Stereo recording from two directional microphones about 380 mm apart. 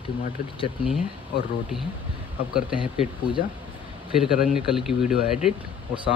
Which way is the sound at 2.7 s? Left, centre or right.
Centre.